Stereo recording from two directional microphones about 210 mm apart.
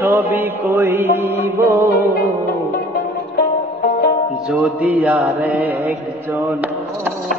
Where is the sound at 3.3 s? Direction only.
45° left (ahead or behind).